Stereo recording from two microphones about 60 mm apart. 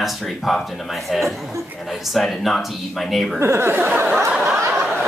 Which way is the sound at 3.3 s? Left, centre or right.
Right.